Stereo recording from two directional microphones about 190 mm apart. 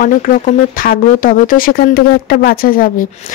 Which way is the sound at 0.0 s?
45° left (ahead or behind).